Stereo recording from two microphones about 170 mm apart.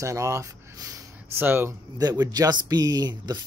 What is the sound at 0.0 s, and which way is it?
Speech, 15° right (ahead or behind).